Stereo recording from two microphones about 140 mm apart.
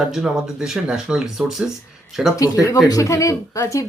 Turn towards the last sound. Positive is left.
turn(degrees=20)  # may be behind; listen again after turning